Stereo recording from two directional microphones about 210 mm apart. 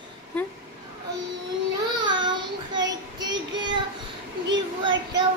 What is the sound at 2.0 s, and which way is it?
Child singing, 20° right (ahead or behind).